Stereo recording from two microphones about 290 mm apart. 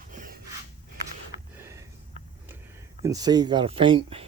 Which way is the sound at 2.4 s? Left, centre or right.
Centre.